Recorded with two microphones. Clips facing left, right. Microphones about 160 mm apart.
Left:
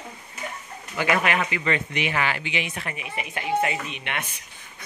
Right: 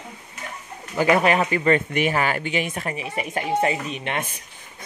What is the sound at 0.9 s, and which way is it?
Speech, 35° right (ahead or behind).